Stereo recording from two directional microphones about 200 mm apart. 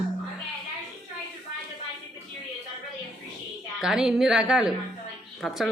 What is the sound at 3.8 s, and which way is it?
Speech, 5° right (ahead or behind).